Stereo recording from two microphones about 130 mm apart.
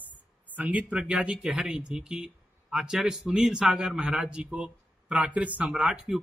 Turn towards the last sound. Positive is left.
turn(degrees=-5)  # may be behind; listen again after turning